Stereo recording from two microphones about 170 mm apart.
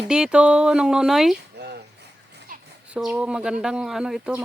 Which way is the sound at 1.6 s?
80° right.